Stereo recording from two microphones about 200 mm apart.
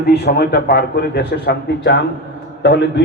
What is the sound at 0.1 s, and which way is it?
A man's voice, 50° left (ahead or behind).